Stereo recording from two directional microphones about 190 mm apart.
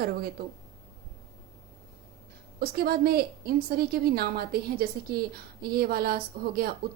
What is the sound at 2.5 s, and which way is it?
A woman's voice, 55° right (ahead or behind).